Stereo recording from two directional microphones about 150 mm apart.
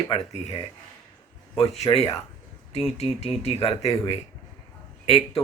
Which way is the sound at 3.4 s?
45° left (ahead or behind).